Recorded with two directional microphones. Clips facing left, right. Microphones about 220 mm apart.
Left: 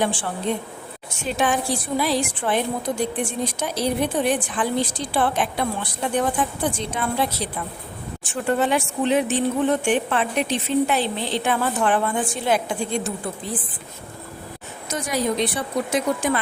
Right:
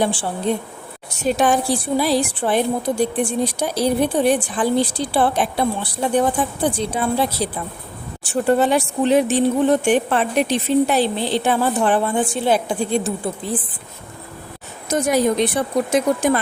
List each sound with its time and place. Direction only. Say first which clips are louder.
0.5 s a woman's voice: right 4 dB; 35° right (ahead or behind)
14.8 s speech: right 7 dB; 45° right (ahead or behind)